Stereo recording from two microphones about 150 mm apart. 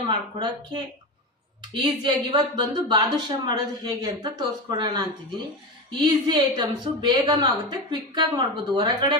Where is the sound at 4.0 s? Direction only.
30° right (ahead or behind).